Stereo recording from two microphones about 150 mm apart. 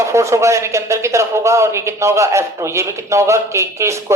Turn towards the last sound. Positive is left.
turn(degrees=-20)  # may be behind; listen again after turning